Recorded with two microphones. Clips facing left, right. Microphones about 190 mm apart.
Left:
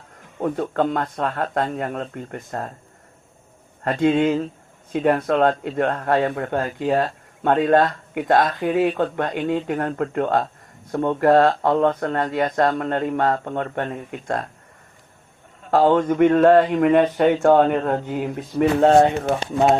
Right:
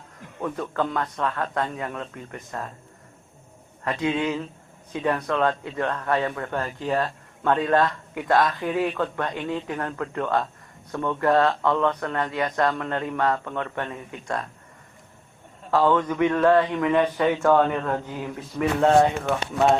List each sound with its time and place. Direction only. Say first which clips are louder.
0.3 s speech: left 5 dB; 35° left (ahead or behind)
3.8 s speech: left 7 dB; 45° left (ahead or behind)
6.1 s speech: left 5 dB; 40° left (ahead or behind)
9.5 s speech: left 6 dB; 50° left (ahead or behind)
11.2 s speech: left 5 dB; 50° left (ahead or behind)
15.7 s speech: left 4 dB; 40° left (ahead or behind)
17.2 s speech: left 4 dB; 35° left (ahead or behind)